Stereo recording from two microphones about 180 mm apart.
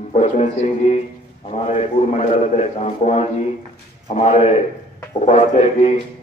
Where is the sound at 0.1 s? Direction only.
35° left (ahead or behind).